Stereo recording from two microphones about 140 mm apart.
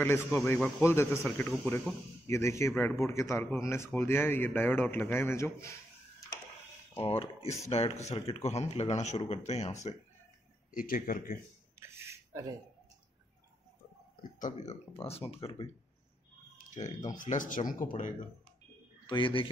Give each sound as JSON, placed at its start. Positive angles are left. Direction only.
{"t": 0.0, "sound": "speech", "side_deg": 20}
{"t": 0.6, "sound": "speech", "side_deg": 10}
{"t": 0.8, "sound": "speech", "side_deg": 20}
{"t": 6.9, "sound": "speech", "side_deg": 45}
{"t": 10.7, "sound": "speech", "side_deg": 75}
{"t": 11.8, "sound": "a sound", "side_deg": -20}
{"t": 14.4, "sound": "speech", "side_deg": 50}
{"t": 16.7, "sound": "speech", "side_deg": 60}
{"t": 19.0, "sound": "a man's voice", "side_deg": 35}